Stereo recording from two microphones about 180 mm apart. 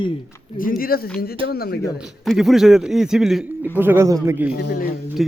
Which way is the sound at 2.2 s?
Centre (ahead or behind).